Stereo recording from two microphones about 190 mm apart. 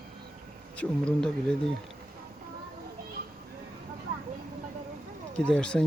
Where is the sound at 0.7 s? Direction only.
5° left (ahead or behind).